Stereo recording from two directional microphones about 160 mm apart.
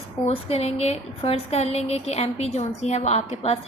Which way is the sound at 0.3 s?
40° left (ahead or behind).